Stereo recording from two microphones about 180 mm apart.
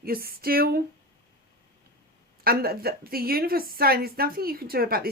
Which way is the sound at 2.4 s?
60° right (ahead or behind).